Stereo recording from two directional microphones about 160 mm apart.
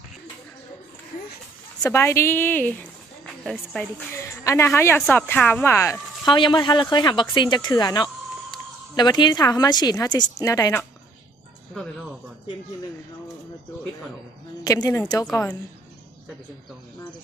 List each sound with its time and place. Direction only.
1.8 s a woman's voice: 15° left (ahead or behind)
4.1 s a woman's voice: 15° left (ahead or behind)
11.7 s speech: centre (ahead or behind)
14.6 s a woman's voice: 20° left (ahead or behind)